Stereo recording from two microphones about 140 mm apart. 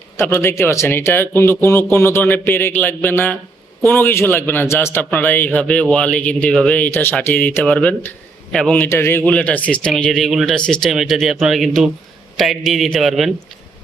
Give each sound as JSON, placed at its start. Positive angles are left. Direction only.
{"t": 0.2, "sound": "a man's voice", "side_deg": 20}